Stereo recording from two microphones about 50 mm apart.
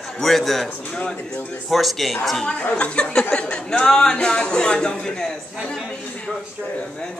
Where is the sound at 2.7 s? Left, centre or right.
Left.